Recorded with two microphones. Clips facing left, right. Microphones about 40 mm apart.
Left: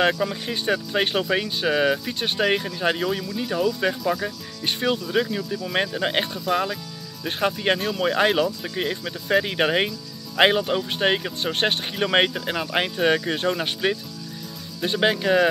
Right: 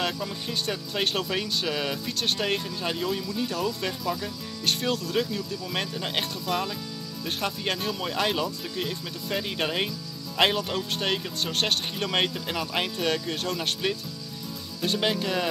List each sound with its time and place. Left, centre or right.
0.0 s speech: left
0.5 s speech: left
3.3 s speech: centre
6.2 s speech: centre